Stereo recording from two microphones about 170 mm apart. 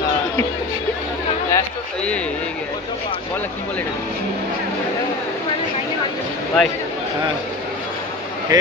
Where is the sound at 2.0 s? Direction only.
5° left (ahead or behind).